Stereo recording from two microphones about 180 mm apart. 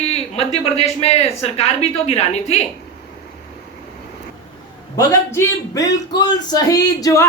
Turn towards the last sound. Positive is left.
turn(degrees=20)  # may be behind; listen again after turning